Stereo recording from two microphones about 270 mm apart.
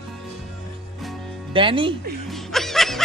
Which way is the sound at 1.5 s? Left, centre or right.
Centre.